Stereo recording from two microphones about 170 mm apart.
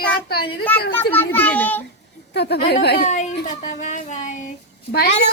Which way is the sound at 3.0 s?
45° left (ahead or behind).